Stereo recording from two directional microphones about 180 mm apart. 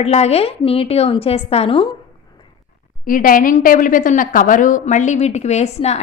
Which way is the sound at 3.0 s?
50° left (ahead or behind).